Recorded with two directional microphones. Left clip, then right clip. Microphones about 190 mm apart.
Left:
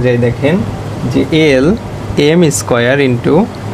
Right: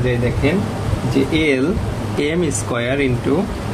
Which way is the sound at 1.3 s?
60° left (ahead or behind).